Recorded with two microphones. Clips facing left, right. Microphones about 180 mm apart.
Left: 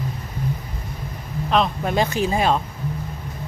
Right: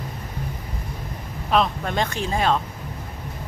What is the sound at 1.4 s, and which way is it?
Speech, centre (ahead or behind).